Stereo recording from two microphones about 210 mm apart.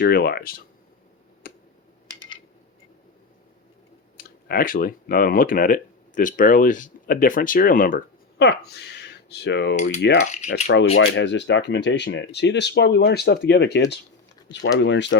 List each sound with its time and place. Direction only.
0.0 s speech: 50° left (ahead or behind)
1.5 s a sound: 45° left (ahead or behind)
4.2 s speech: 45° left (ahead or behind)